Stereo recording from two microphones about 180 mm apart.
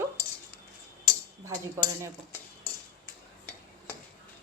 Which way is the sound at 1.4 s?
15° right (ahead or behind).